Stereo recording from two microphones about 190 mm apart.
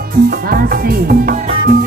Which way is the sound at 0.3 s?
55° right (ahead or behind).